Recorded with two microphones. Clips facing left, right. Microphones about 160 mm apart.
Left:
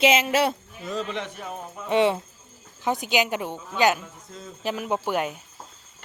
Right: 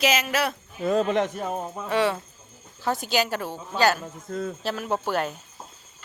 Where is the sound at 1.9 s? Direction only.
25° left (ahead or behind).